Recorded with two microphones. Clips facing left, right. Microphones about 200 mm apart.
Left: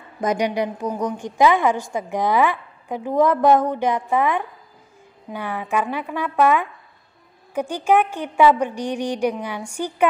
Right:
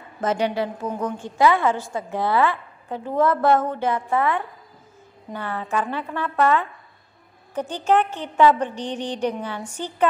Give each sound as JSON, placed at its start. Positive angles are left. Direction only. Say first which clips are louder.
{"t": 0.2, "sound": "a woman's voice", "louder": "left 1 dB", "side_deg": 15}